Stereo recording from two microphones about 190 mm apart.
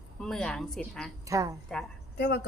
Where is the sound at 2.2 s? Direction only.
65° left (ahead or behind).